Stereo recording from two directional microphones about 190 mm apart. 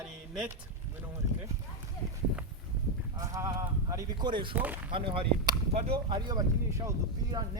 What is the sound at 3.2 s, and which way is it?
Speech, 15° right (ahead or behind).